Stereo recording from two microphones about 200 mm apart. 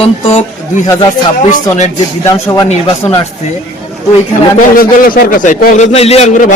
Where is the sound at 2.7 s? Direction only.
30° left (ahead or behind).